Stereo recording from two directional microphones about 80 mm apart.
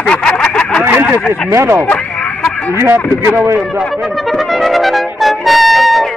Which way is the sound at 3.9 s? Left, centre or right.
Centre.